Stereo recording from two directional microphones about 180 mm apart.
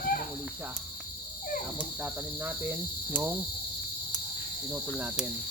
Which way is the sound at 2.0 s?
10° right (ahead or behind).